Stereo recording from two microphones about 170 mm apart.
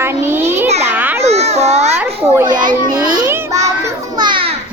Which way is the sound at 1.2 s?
40° right (ahead or behind).